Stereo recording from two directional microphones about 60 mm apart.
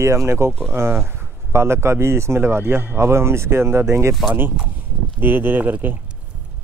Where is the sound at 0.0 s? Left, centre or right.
Right.